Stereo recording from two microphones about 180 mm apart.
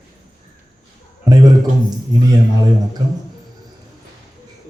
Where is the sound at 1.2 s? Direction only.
20° right (ahead or behind).